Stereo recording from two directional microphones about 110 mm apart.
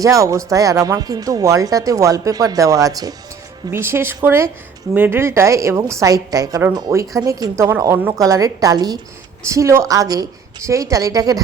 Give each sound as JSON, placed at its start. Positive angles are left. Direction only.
{"t": 0.0, "sound": "speech", "side_deg": -30}
{"t": 3.7, "sound": "a woman's voice", "side_deg": -20}